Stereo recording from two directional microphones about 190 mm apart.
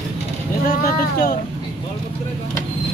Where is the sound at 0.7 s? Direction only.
45° left (ahead or behind).